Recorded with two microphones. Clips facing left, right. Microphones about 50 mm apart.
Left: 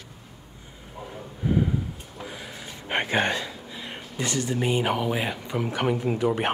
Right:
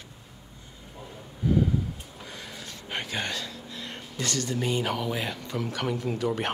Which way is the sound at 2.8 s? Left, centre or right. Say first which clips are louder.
Left 8 dB; left.